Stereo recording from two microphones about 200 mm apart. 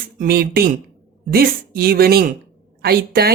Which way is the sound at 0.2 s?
50° right (ahead or behind).